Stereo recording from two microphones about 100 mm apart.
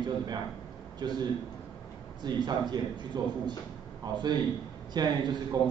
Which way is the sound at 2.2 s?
45° right (ahead or behind).